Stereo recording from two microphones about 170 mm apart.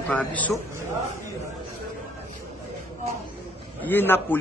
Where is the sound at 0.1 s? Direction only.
10° left (ahead or behind).